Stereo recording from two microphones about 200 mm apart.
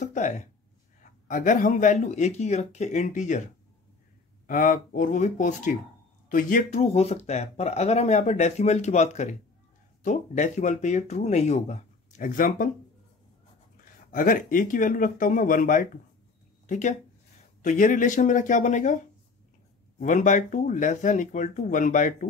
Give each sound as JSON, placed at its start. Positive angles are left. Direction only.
{"t": 0.0, "sound": "speech", "side_deg": 40}
{"t": 4.5, "sound": "speech", "side_deg": 45}
{"t": 14.1, "sound": "speech", "side_deg": 45}
{"t": 20.0, "sound": "speech", "side_deg": 40}